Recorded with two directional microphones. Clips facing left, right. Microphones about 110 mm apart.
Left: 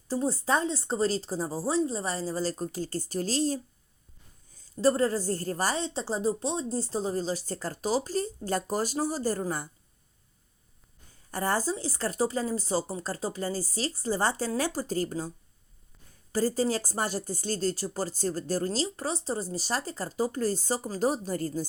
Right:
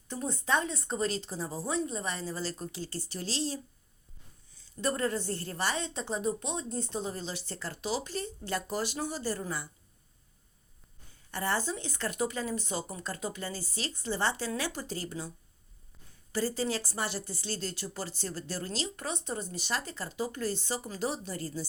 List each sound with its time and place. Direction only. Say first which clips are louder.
0.1 s speech: left 4 dB; 35° left (ahead or behind)
11.3 s speech: left 4 dB; 40° left (ahead or behind)
16.3 s speech: left 5 dB; 40° left (ahead or behind)